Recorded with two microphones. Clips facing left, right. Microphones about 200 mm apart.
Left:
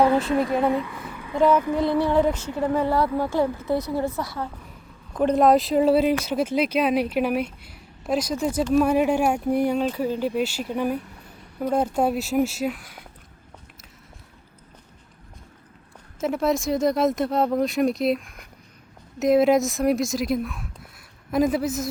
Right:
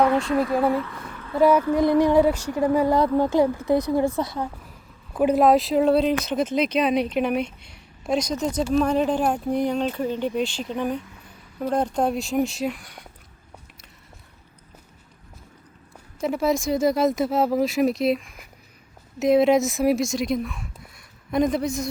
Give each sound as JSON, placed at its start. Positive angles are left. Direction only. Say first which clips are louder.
{"t": 0.3, "sound": "speech", "louder": "even", "side_deg": 25}
{"t": 0.7, "sound": "speech", "louder": "even", "side_deg": 15}
{"t": 0.9, "sound": "a sound", "louder": "even", "side_deg": 5}
{"t": 1.4, "sound": "speech", "louder": "right 2 dB", "side_deg": -10}
{"t": 5.1, "sound": "speech", "louder": "even", "side_deg": -5}
{"t": 16.2, "sound": "speech", "louder": "even", "side_deg": 0}